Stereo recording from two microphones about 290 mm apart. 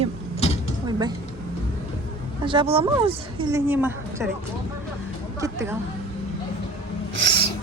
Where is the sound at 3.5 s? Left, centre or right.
Centre.